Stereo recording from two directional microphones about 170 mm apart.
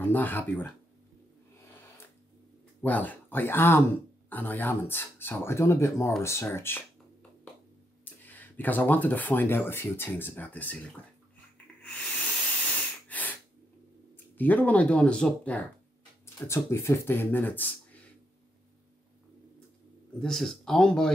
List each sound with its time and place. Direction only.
0.0 s speech: 10° left (ahead or behind)
2.8 s speech: 10° left (ahead or behind)
8.0 s speech: 10° left (ahead or behind)
11.8 s a sound: 5° left (ahead or behind)
14.1 s speech: 10° left (ahead or behind)
20.2 s speech: 5° left (ahead or behind)